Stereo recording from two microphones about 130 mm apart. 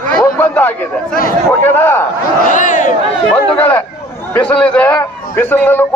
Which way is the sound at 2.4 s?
90° left.